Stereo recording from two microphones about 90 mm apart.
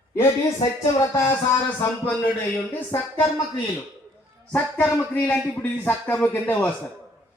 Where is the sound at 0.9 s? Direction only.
30° left (ahead or behind).